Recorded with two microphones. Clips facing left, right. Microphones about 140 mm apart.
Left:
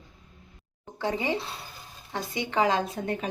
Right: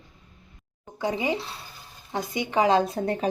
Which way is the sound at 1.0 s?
15° right (ahead or behind).